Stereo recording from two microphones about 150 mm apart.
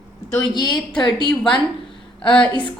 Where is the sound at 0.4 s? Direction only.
30° left (ahead or behind).